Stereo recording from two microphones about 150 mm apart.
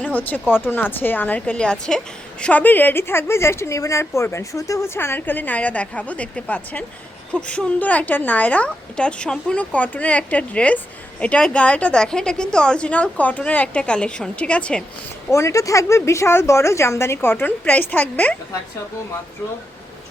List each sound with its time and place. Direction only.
0.0 s a woman's voice: 10° left (ahead or behind)
15.3 s a woman's voice: 20° left (ahead or behind)